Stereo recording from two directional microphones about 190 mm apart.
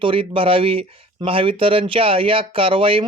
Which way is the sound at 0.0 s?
30° right (ahead or behind).